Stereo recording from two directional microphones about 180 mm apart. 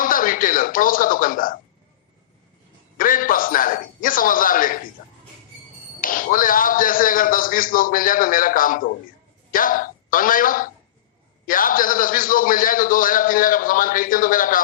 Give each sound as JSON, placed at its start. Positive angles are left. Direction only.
{"t": 0.0, "sound": "speech", "side_deg": 50}
{"t": 3.0, "sound": "a man's voice", "side_deg": 50}
{"t": 5.0, "sound": "a sound", "side_deg": 55}
{"t": 6.0, "sound": "a man's voice", "side_deg": 50}